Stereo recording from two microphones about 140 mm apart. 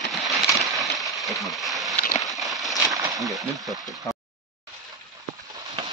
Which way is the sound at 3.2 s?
Centre (ahead or behind).